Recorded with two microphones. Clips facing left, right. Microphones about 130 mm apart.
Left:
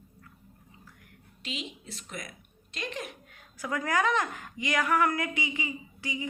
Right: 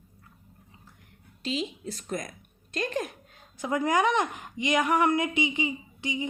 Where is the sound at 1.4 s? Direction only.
35° right (ahead or behind).